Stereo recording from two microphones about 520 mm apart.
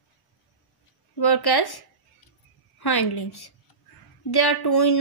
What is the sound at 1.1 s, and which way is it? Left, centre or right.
Speech, left.